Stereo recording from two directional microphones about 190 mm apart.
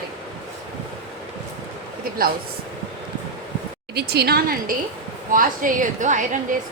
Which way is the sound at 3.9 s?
60° right (ahead or behind).